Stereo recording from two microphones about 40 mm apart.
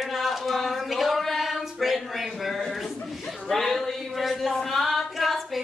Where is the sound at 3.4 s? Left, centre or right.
Centre.